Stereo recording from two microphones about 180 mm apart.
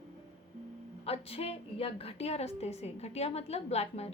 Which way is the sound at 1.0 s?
35° left (ahead or behind).